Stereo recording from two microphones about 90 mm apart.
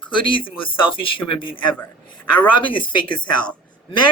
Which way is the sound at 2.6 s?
65° left (ahead or behind).